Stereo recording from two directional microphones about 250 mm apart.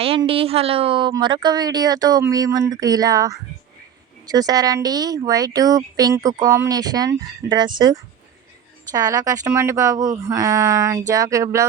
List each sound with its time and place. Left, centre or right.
0.0 s a woman's voice: right